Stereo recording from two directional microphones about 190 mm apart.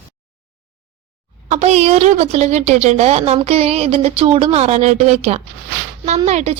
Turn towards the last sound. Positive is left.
turn(degrees=-35)  # may be behind; listen again after turning